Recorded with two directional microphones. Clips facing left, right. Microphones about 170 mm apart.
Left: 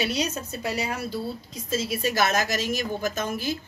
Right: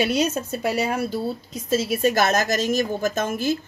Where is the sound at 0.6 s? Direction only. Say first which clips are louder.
Right 6 dB; 55° right (ahead or behind).